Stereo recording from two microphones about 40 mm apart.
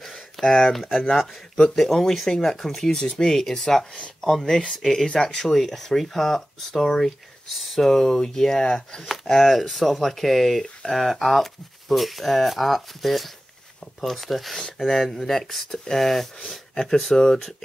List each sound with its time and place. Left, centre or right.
0.0 s a sound: centre
0.7 s speech: centre
7.4 s speech: centre
8.6 s speech: left
9.0 s speech: centre